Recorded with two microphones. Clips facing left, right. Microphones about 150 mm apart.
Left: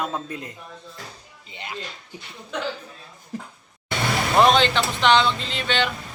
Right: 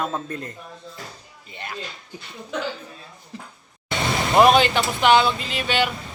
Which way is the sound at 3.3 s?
45° left (ahead or behind).